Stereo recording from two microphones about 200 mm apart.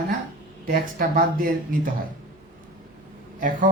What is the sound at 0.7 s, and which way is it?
Speech, 45° right (ahead or behind).